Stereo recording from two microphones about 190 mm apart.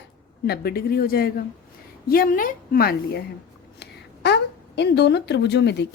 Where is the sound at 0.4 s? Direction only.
55° left (ahead or behind).